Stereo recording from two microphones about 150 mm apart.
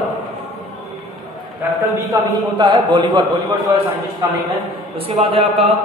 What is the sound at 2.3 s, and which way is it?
A man's voice, 30° right (ahead or behind).